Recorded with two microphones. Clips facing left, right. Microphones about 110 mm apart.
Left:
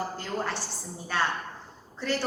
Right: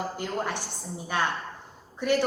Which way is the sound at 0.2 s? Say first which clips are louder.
Right 1 dB; 15° right (ahead or behind).